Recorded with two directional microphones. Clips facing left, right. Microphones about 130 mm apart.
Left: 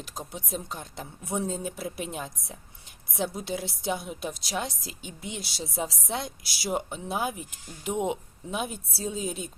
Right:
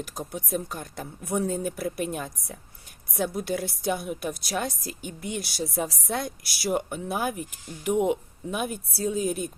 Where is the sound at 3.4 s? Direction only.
50° right (ahead or behind).